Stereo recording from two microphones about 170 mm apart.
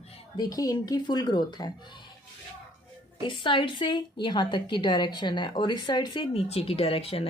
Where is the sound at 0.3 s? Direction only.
20° left (ahead or behind).